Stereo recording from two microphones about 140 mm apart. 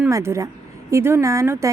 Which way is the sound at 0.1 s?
20° right (ahead or behind).